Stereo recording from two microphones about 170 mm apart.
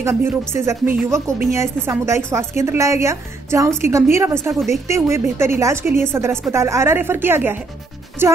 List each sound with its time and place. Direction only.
0.0 s a woman's voice: 15° right (ahead or behind)